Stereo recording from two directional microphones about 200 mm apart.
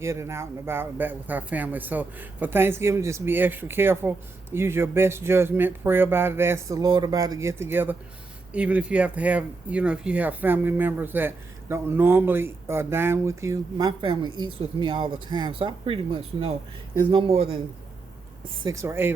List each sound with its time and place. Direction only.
0.0 s speech: 15° right (ahead or behind)
18.6 s speech: 15° right (ahead or behind)